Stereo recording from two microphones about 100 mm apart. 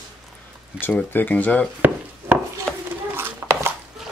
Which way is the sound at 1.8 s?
20° right (ahead or behind).